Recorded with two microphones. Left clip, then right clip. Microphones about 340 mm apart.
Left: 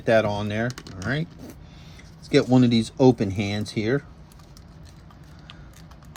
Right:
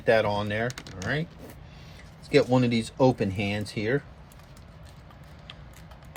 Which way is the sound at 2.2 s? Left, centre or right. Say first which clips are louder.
Left 2 dB; centre.